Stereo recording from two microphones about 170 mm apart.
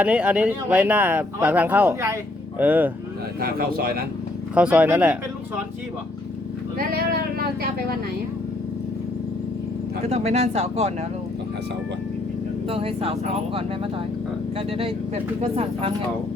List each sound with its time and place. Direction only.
0.0 s speech: 10° right (ahead or behind)
3.4 s speech: 60° right (ahead or behind)
4.5 s speech: 5° right (ahead or behind)
6.7 s speech: 65° right (ahead or behind)
10.0 s speech: 40° right (ahead or behind)
12.6 s speech: 35° right (ahead or behind)
14.7 s speech: 35° right (ahead or behind)